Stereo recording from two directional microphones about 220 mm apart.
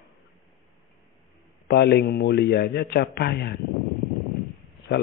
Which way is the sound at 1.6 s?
45° left (ahead or behind).